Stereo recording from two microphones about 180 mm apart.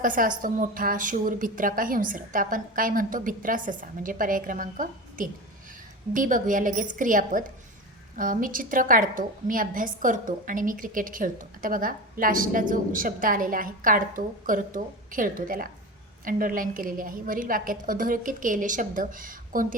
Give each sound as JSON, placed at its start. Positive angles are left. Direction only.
{"t": 0.0, "sound": "a woman's voice", "side_deg": -50}